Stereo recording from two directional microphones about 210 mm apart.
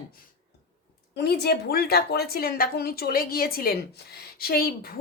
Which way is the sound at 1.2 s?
50° left (ahead or behind).